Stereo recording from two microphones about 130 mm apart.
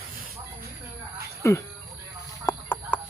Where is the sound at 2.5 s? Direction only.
15° left (ahead or behind).